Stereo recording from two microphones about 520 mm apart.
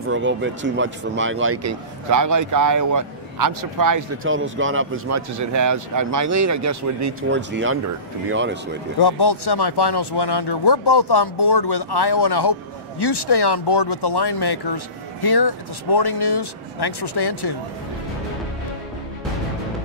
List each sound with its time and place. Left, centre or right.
0.1 s speech: right
4.2 s speech: right
9.0 s speech: left